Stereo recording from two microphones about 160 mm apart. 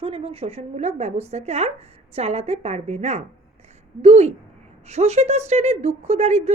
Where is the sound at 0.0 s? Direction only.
35° right (ahead or behind).